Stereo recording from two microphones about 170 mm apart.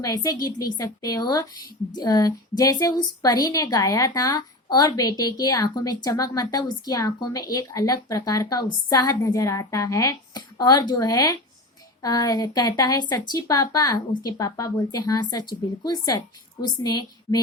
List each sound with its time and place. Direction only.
0.0 s a woman's voice: 20° left (ahead or behind)